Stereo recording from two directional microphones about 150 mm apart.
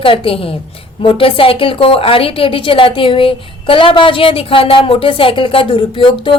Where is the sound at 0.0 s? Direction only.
35° left (ahead or behind).